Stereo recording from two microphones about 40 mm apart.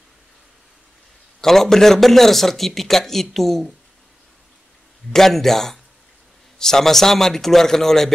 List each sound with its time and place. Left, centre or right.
1.4 s a man's voice: centre
5.1 s a man's voice: centre